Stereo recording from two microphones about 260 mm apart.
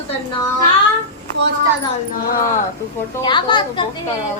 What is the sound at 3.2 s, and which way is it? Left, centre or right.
Speech, centre.